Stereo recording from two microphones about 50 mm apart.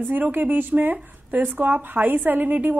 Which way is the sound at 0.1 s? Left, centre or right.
Right.